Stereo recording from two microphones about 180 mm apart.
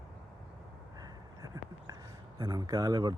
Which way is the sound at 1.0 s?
20° right (ahead or behind).